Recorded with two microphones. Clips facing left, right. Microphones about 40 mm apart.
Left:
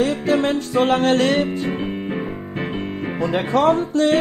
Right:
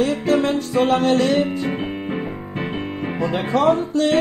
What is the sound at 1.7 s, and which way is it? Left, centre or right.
Music, centre.